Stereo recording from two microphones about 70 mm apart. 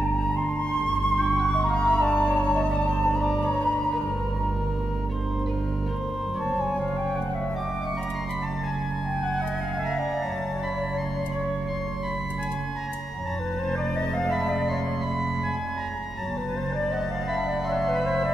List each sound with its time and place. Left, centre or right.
1.1 s music: centre
14.2 s music: centre
17.7 s music: centre